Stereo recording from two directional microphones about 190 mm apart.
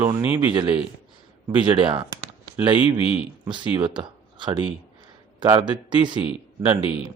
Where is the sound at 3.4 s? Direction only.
25° right (ahead or behind).